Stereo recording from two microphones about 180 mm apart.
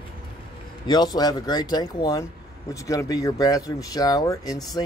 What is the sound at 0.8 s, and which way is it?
Speech, 20° left (ahead or behind).